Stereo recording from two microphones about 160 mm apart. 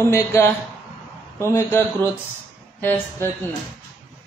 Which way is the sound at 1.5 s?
15° left (ahead or behind).